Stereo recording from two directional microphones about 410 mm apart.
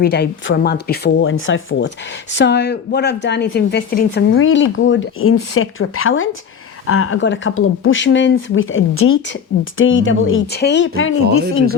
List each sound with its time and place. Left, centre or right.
0.0 s a woman's voice: left